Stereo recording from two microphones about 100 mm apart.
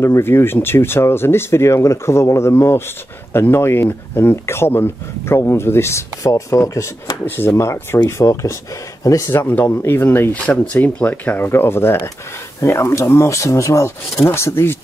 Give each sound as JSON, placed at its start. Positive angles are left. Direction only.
{"t": 0.0, "sound": "speech", "side_deg": 25}
{"t": 9.4, "sound": "speech", "side_deg": 20}